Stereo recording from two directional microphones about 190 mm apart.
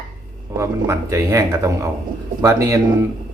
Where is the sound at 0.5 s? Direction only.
15° right (ahead or behind).